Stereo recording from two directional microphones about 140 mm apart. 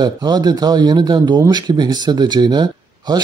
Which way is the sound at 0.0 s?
30° right (ahead or behind).